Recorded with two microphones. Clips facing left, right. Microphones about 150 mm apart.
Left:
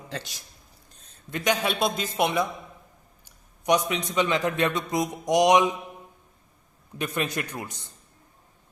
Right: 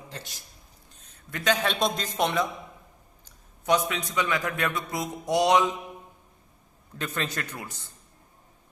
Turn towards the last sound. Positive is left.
turn(degrees=20)  # may be behind; listen again after turning